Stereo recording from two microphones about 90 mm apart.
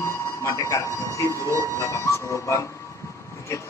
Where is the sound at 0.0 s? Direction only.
35° left (ahead or behind).